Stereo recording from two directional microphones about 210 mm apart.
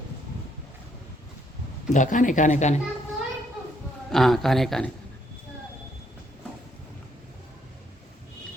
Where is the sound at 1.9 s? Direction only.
35° left (ahead or behind).